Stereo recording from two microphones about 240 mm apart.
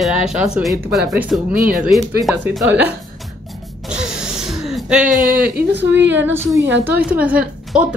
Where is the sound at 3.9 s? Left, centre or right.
Centre.